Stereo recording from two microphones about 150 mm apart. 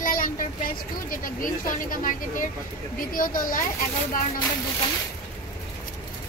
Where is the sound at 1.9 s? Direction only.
65° left (ahead or behind).